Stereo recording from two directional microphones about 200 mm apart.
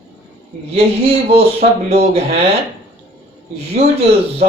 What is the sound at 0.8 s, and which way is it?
Speech, 30° right (ahead or behind).